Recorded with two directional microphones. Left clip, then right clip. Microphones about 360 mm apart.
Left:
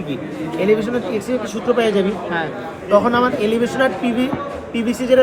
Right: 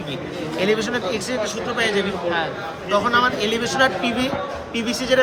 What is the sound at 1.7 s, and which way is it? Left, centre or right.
Speech, centre.